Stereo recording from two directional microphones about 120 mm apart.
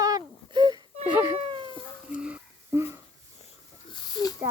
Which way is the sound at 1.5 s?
40° right (ahead or behind).